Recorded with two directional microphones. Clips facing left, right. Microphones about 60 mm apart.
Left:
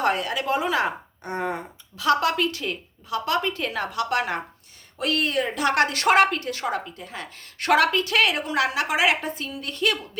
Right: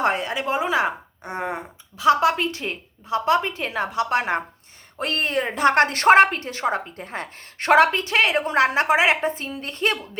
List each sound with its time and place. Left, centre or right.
0.0 s a woman's voice: right
6.9 s a woman's voice: right